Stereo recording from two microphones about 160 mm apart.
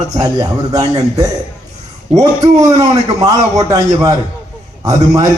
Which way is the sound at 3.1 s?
20° right (ahead or behind).